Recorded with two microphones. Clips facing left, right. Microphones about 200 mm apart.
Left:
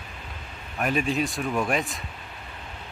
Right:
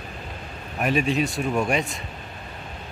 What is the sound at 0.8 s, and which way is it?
Speech, centre (ahead or behind).